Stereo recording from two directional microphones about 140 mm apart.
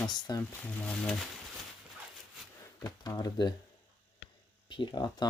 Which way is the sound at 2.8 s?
25° left (ahead or behind).